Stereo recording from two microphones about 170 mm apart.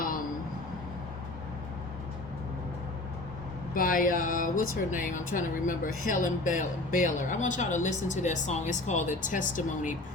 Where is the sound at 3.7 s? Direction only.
55° left (ahead or behind).